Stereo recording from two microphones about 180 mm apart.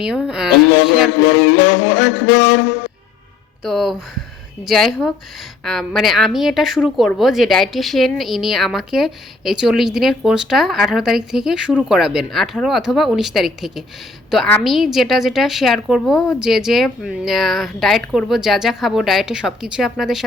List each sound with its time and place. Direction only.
0.3 s a woman's voice: 5° right (ahead or behind)
1.3 s music: 70° left (ahead or behind)
3.6 s a woman's voice: centre (ahead or behind)